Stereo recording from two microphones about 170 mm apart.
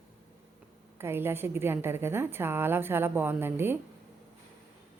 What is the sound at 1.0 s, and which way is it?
A woman's voice, 15° right (ahead or behind).